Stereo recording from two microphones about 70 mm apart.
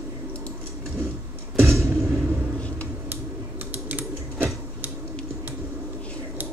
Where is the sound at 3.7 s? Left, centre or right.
Right.